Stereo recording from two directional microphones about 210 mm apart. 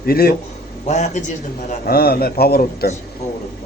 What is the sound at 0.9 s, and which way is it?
A man's voice, 35° left (ahead or behind).